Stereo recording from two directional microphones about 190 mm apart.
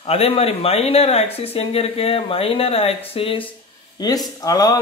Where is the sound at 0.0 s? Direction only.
30° left (ahead or behind).